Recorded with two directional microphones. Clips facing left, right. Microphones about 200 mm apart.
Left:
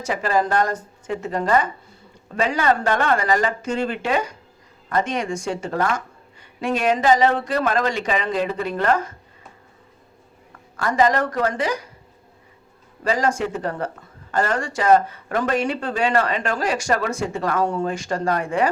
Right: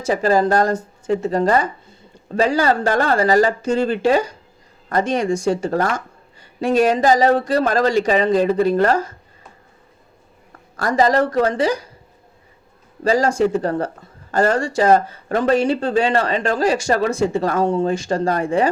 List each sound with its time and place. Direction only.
0.0 s speech: 35° right (ahead or behind)
10.8 s speech: 35° right (ahead or behind)
13.1 s speech: 30° right (ahead or behind)